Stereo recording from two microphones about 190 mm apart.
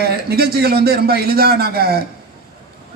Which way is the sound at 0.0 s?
55° right (ahead or behind).